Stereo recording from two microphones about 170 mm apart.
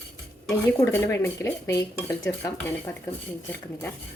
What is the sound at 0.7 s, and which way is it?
Speech, 15° left (ahead or behind).